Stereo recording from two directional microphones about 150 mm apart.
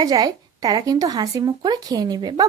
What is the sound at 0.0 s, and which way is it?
Speech, 25° right (ahead or behind).